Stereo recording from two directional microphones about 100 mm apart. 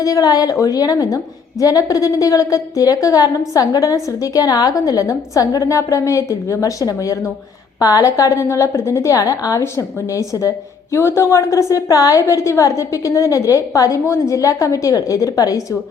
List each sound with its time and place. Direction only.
0.0 s a woman's voice: 35° left (ahead or behind)